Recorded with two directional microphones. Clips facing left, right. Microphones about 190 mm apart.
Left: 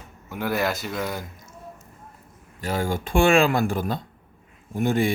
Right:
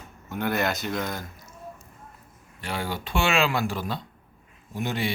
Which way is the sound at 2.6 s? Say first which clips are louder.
Left 5 dB; 40° left (ahead or behind).